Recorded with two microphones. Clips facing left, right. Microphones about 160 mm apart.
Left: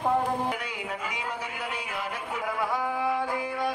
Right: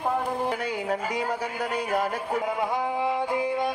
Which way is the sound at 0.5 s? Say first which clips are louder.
Right 5 dB; 35° right (ahead or behind).